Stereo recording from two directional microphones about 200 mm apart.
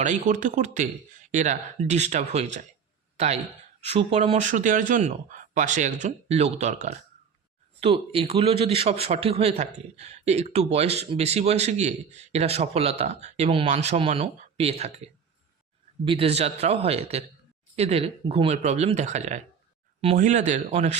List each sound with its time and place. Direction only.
0.0 s a man's voice: 40° right (ahead or behind)